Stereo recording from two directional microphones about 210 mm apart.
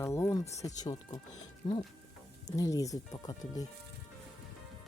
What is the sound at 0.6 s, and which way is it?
Speech, 15° left (ahead or behind).